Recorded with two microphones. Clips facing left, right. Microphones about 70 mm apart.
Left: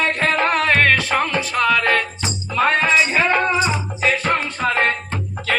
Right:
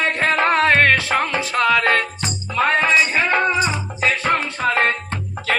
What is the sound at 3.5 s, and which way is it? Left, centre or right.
Music, right.